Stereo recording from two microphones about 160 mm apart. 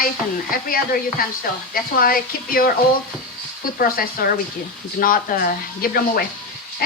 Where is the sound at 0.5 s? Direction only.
65° left (ahead or behind).